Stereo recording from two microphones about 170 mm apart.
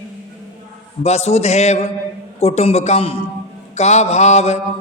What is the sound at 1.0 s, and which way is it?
Speech, 40° left (ahead or behind).